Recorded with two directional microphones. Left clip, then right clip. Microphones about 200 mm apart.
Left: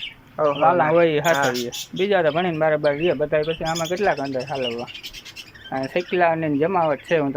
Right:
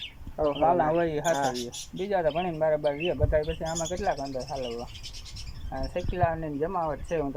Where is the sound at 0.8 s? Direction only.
Centre (ahead or behind).